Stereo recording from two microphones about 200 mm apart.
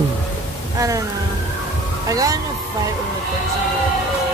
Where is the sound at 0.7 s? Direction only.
15° right (ahead or behind).